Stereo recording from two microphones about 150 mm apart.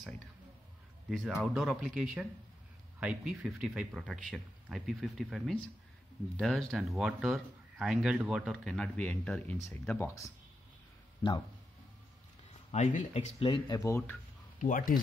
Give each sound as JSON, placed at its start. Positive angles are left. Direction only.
{"t": 1.2, "sound": "speech", "side_deg": -5}
{"t": 12.7, "sound": "speech", "side_deg": 50}
{"t": 13.4, "sound": "speech", "side_deg": 35}
{"t": 13.7, "sound": "speech", "side_deg": 20}
{"t": 14.6, "sound": "speech", "side_deg": 65}